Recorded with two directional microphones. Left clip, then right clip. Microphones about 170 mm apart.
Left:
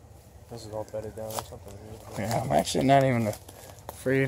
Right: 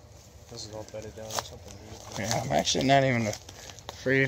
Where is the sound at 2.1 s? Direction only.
10° left (ahead or behind).